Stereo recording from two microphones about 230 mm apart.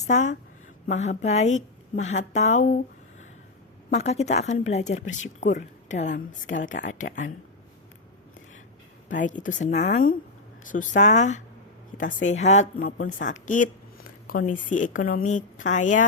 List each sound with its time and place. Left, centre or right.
0.0 s a woman's voice: left
3.9 s a woman's voice: left
9.0 s a woman's voice: left